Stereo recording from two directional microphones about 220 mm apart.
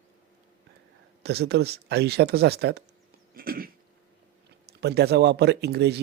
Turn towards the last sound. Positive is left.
turn(degrees=-50)  # may be behind; listen again after turning